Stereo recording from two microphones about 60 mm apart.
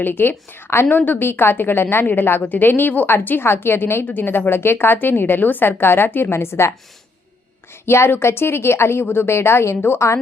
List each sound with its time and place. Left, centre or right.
0.0 s a woman's voice: left